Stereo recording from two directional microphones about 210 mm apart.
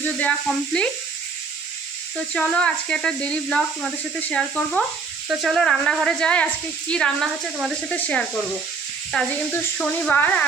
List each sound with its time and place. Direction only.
0.0 s speech: 5° left (ahead or behind)
2.3 s speech: 5° left (ahead or behind)